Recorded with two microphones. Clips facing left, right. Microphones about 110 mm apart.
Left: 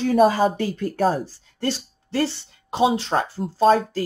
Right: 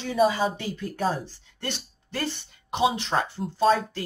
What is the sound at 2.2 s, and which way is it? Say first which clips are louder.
Speech: left 7 dB; 30° left (ahead or behind).